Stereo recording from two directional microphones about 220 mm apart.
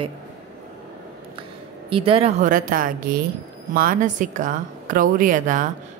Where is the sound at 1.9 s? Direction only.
25° right (ahead or behind).